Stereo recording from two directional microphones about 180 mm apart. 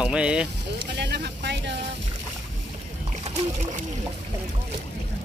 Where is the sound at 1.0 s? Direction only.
70° right (ahead or behind).